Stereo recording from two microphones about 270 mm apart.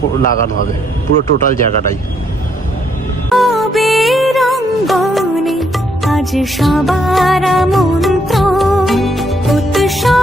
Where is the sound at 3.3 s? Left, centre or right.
Centre.